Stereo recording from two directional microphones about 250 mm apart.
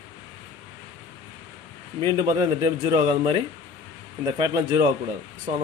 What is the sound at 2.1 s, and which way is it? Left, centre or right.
Speech, centre.